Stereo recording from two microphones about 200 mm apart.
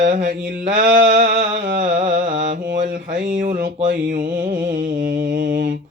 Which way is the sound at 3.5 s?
55° right (ahead or behind).